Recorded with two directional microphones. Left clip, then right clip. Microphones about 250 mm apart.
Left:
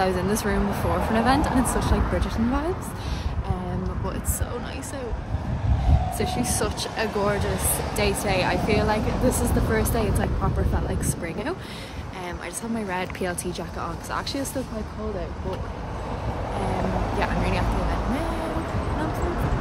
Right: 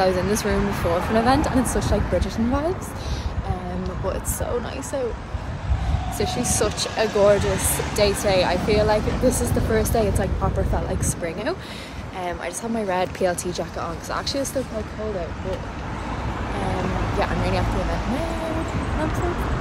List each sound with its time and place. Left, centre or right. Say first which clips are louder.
0.0 s speech: right 3 dB; centre
6.1 s speech: right 5 dB; centre
12.8 s speech: right 7 dB; centre
17.2 s speech: right 3 dB; centre